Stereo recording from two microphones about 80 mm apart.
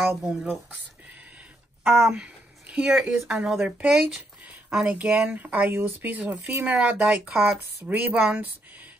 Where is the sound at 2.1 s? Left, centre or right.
Centre.